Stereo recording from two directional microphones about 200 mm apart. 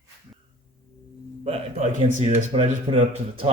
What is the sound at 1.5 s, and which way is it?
Speech, 30° right (ahead or behind).